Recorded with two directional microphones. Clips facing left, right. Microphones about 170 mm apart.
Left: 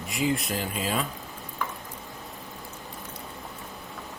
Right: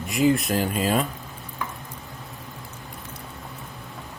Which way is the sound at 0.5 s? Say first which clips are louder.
Right 6 dB; 45° right (ahead or behind).